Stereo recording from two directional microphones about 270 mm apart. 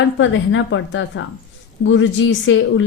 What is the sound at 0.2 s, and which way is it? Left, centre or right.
A woman's voice, left.